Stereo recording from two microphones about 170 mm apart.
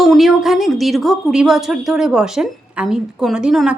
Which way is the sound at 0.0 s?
Centre (ahead or behind).